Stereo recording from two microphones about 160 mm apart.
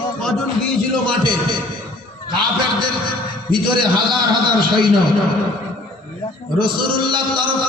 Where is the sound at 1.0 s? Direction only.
30° right (ahead or behind).